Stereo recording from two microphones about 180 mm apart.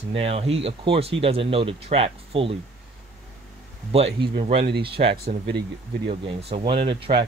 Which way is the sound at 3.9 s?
30° right (ahead or behind).